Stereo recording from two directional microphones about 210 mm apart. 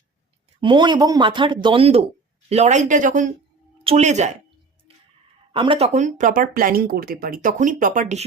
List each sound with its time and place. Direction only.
0.6 s speech: 20° right (ahead or behind)
5.5 s speech: 25° right (ahead or behind)